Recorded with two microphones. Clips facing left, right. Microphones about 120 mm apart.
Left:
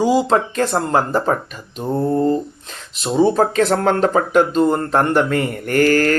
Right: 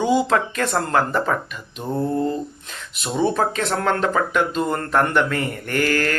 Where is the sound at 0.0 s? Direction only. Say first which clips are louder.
Left 3 dB; 35° left (ahead or behind).